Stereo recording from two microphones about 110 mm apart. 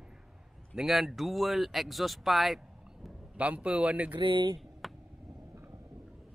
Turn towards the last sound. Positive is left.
turn(degrees=0)  # may be behind; listen again after turning